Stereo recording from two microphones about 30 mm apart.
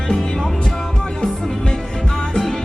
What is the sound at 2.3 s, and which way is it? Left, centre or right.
Music, centre.